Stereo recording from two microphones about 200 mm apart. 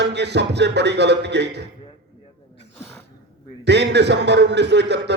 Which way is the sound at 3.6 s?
60° right (ahead or behind).